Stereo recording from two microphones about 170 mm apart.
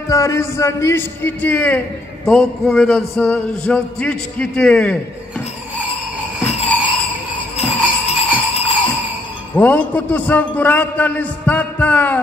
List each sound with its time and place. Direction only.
0.1 s a man's voice: 20° left (ahead or behind)
6.4 s a sound: 35° left (ahead or behind)
7.5 s music: 40° left (ahead or behind)
9.6 s a man's voice: 10° left (ahead or behind)